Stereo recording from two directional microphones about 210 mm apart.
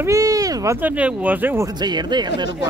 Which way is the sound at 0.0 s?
15° right (ahead or behind).